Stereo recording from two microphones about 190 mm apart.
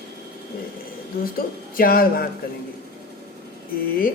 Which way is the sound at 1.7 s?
50° left (ahead or behind).